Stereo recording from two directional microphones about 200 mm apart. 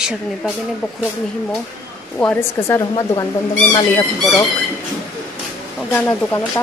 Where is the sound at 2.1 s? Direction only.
10° left (ahead or behind).